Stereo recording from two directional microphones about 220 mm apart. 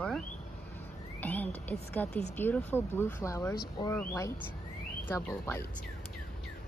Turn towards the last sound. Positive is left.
turn(degrees=10)  # may be behind; listen again after turning